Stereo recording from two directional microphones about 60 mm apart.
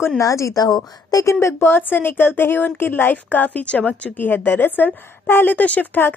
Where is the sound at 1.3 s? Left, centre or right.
Left.